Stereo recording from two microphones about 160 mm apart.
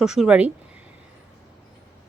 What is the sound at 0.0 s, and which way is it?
Speech, centre (ahead or behind).